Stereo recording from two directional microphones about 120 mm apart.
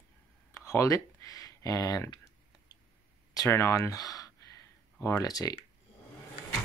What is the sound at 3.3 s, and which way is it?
Speech, 25° left (ahead or behind).